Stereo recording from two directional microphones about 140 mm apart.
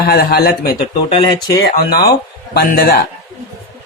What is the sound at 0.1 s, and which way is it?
Speech, 90° left.